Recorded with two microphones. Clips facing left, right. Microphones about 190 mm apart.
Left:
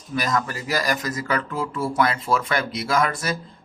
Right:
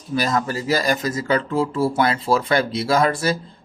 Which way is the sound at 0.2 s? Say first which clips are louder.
Right 3 dB; 30° right (ahead or behind).